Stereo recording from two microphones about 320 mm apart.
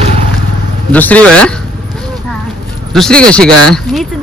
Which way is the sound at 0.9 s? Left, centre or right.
Centre.